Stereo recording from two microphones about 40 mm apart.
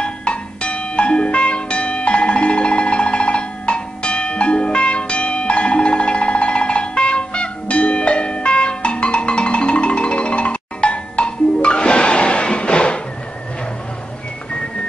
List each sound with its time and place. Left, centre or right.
0.0 s music: left